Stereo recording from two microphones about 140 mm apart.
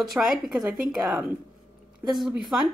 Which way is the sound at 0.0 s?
5° right (ahead or behind).